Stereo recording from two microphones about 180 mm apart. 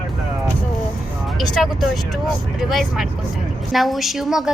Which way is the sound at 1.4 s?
Centre (ahead or behind).